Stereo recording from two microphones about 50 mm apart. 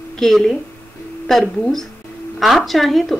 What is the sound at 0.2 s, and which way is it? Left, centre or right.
A woman's voice, centre.